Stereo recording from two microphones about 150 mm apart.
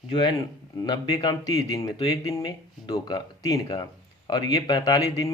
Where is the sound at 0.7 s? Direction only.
25° left (ahead or behind).